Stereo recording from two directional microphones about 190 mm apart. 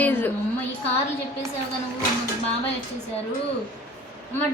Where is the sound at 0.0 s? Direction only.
10° left (ahead or behind).